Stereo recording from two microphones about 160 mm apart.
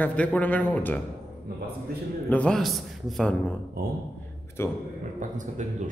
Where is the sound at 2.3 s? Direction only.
5° left (ahead or behind).